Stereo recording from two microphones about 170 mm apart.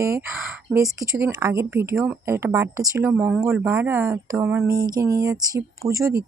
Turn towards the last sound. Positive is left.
turn(degrees=-15)  # may be behind; listen again after turning